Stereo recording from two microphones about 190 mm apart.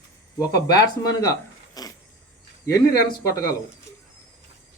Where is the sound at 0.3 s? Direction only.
20° left (ahead or behind).